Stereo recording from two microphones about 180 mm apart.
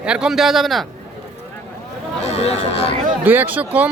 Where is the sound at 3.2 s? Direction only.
10° right (ahead or behind).